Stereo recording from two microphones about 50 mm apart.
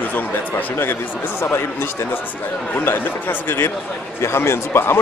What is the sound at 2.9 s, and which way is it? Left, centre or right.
Speech, left.